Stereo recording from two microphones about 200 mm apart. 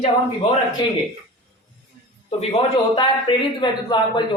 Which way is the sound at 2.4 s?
25° left (ahead or behind).